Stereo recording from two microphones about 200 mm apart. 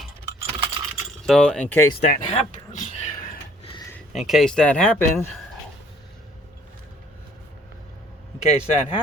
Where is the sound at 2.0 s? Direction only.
40° left (ahead or behind).